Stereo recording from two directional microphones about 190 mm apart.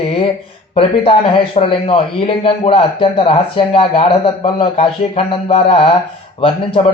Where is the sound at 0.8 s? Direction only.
30° left (ahead or behind).